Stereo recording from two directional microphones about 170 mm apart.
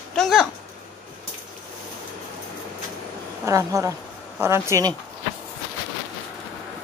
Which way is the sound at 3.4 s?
15° right (ahead or behind).